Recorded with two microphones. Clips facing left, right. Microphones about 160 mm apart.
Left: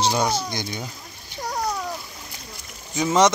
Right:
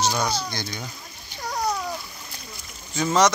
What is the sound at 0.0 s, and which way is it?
Speech, 25° left (ahead or behind).